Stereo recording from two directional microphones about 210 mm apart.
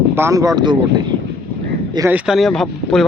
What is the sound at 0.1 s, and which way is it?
Speech, 15° right (ahead or behind).